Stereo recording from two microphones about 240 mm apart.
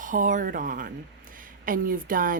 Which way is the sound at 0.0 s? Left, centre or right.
Right.